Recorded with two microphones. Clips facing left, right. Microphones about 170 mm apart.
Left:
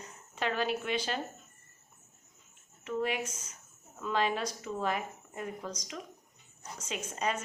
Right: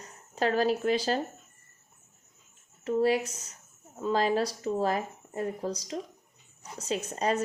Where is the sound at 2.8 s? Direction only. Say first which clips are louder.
Right 8 dB; 35° right (ahead or behind).